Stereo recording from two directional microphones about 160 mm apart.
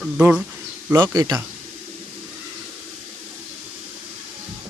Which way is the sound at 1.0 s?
25° right (ahead or behind).